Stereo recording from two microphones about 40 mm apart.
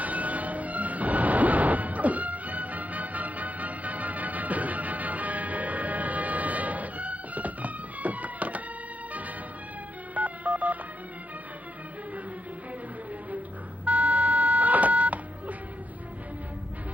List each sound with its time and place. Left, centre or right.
0.0 s music: right
10.1 s telephone dialing: right
13.8 s a sound: right